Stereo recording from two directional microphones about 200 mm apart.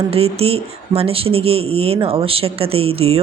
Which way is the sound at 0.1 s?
30° right (ahead or behind).